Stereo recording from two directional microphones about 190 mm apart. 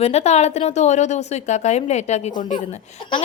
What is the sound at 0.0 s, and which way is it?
A woman's voice, 35° left (ahead or behind).